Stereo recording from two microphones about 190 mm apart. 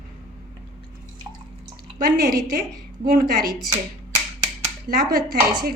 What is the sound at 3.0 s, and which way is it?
Speech, 45° right (ahead or behind).